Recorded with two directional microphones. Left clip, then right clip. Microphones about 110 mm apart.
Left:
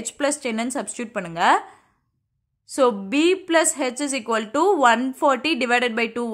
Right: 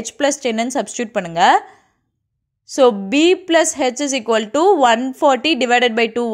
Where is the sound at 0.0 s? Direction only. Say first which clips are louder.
Right 6 dB; 30° right (ahead or behind).